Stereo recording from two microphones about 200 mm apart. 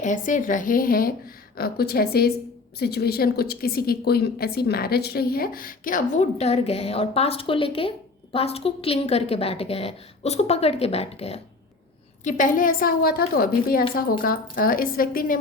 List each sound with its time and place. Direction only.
0.0 s a woman's voice: 40° left (ahead or behind)